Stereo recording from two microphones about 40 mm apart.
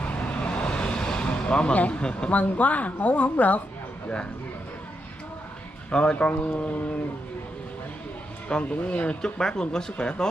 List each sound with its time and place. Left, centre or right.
0.0 s vehicle: left
1.8 s a man's voice: left
2.3 s speech: left
5.9 s speech: left
6.1 s speech: left
8.6 s speech: left
9.2 s a man's voice: centre